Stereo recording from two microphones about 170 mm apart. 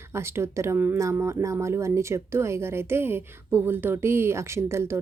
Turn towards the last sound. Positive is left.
turn(degrees=-15)  # may be behind; listen again after turning